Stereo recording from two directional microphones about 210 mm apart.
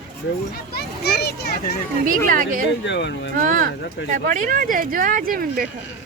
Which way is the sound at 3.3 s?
40° right (ahead or behind).